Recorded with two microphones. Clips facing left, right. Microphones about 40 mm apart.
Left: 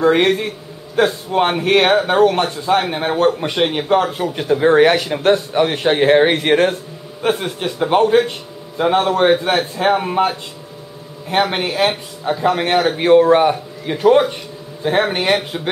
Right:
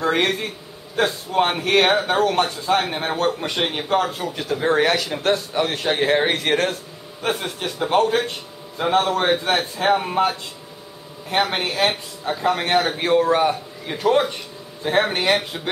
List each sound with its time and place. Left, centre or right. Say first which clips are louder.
0.0 s a man's voice: left 6 dB; centre
4.3 s a man's voice: left 7 dB; left